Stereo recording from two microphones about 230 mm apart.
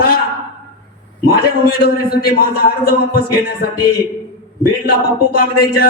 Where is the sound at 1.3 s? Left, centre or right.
Left.